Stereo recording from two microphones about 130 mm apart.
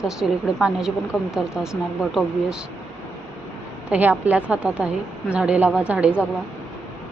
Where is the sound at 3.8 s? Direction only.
10° right (ahead or behind).